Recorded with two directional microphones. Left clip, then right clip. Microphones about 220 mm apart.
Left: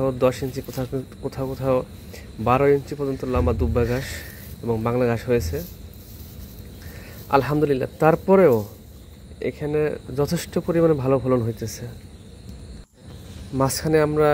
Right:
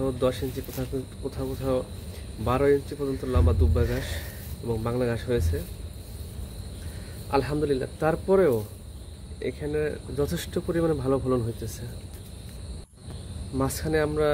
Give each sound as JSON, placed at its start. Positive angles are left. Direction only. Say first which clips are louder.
{"t": 0.0, "sound": "speech", "louder": "left 5 dB", "side_deg": 30}
{"t": 7.4, "sound": "speech", "louder": "left 5 dB", "side_deg": 25}
{"t": 13.6, "sound": "speech", "louder": "left 6 dB", "side_deg": 30}